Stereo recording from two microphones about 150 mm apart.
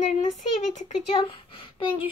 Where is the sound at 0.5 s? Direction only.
50° left (ahead or behind).